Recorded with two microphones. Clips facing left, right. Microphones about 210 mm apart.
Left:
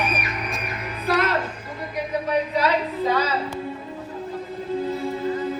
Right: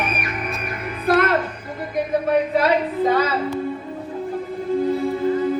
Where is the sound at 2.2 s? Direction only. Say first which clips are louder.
Right 3 dB; 50° right (ahead or behind).